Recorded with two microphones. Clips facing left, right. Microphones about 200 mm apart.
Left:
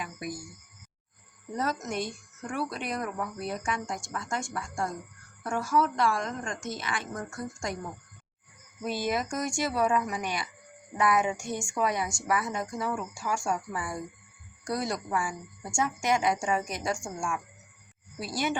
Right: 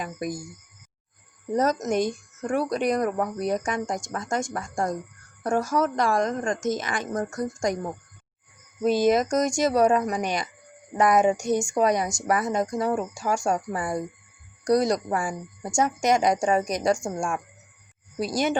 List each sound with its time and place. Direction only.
0.0 s speech: 45° right (ahead or behind)
1.5 s speech: 45° right (ahead or behind)
9.5 s a woman's voice: 40° right (ahead or behind)